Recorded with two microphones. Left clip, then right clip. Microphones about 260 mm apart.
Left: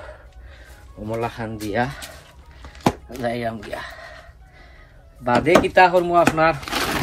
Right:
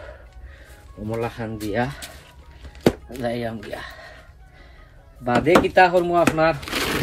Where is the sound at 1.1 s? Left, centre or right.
Centre.